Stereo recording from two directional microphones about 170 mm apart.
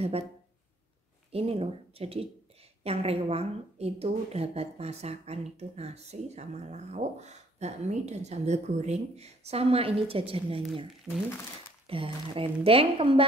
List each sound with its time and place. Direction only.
1.3 s a woman's voice: 35° right (ahead or behind)
11.9 s a woman's voice: 35° right (ahead or behind)